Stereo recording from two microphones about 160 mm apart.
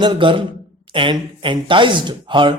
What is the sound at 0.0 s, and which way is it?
Speech, 30° right (ahead or behind).